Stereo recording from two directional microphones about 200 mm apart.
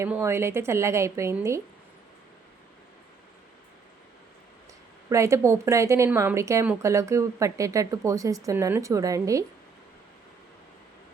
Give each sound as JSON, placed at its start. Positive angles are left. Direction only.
{"t": 0.0, "sound": "a woman's voice", "side_deg": -15}
{"t": 5.0, "sound": "a woman's voice", "side_deg": -15}